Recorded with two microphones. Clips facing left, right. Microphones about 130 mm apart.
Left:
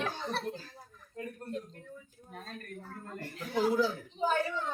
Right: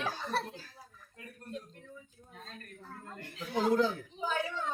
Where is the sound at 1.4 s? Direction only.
45° left (ahead or behind).